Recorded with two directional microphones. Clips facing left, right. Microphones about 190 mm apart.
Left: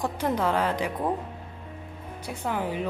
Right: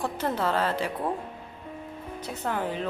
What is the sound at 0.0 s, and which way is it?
Speech, 15° left (ahead or behind).